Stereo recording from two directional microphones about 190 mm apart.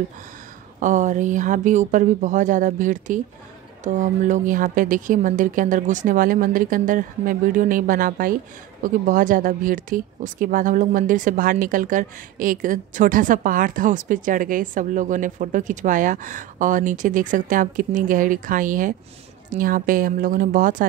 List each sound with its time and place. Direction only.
0.7 s speech: 40° right (ahead or behind)